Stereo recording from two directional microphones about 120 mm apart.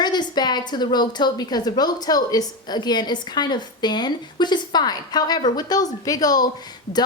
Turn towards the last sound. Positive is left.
turn(degrees=35)  # may be behind; listen again after turning